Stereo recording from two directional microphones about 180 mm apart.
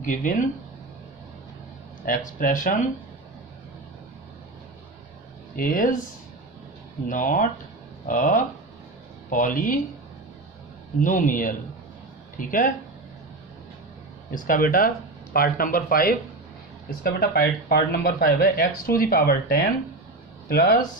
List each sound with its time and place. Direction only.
0.0 s speech: 45° left (ahead or behind)
2.0 s speech: 50° left (ahead or behind)
5.5 s speech: 50° left (ahead or behind)
7.1 s speech: 45° left (ahead or behind)
11.0 s speech: 45° left (ahead or behind)
14.3 s speech: 50° left (ahead or behind)